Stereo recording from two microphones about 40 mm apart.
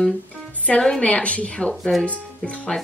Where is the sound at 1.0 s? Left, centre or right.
Left.